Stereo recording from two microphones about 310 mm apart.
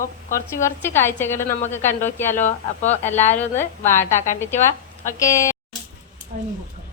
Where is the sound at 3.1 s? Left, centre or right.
Left.